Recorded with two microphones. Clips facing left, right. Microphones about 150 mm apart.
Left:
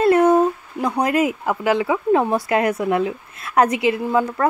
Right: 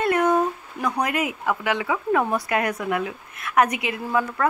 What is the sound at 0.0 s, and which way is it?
Speech, 30° left (ahead or behind).